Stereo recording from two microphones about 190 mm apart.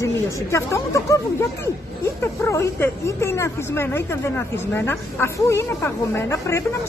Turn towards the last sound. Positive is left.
turn(degrees=15)  # may be behind; listen again after turning